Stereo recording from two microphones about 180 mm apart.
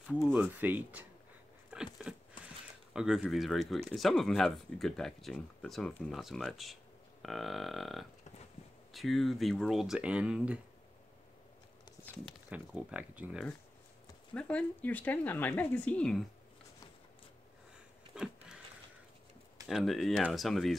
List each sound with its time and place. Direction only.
0.0 s speech: 5° left (ahead or behind)
0.3 s speech: 10° right (ahead or behind)
1.7 s a sound: 5° right (ahead or behind)
2.9 s speech: 5° right (ahead or behind)
12.4 s speech: 10° right (ahead or behind)
14.3 s speech: 5° left (ahead or behind)
18.1 s a sound: 5° right (ahead or behind)
19.7 s speech: centre (ahead or behind)